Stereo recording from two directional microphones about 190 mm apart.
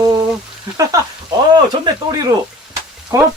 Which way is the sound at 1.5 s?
20° right (ahead or behind).